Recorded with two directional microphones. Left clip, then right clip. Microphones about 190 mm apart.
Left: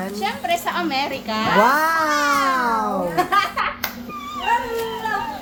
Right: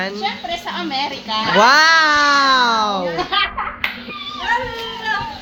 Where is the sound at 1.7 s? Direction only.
10° right (ahead or behind).